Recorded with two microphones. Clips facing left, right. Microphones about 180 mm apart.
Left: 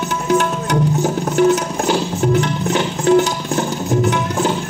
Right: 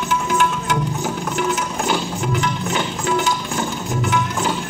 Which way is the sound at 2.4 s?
40° left (ahead or behind).